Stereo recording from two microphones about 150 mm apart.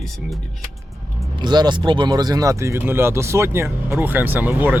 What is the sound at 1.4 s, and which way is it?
Speech, 30° right (ahead or behind).